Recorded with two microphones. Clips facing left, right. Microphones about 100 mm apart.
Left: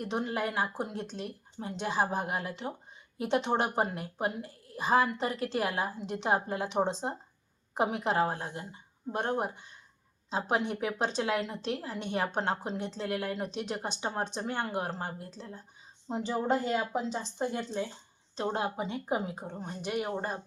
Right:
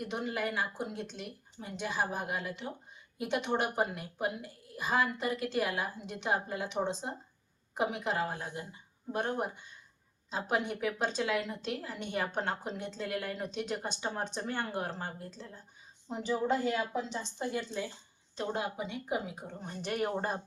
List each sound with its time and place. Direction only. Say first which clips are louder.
0.0 s a woman's voice: left 3 dB; 30° left (ahead or behind)
18.3 s a woman's voice: left 3 dB; 30° left (ahead or behind)
19.5 s speech: left 4 dB; 25° left (ahead or behind)
19.8 s speech: even; 5° left (ahead or behind)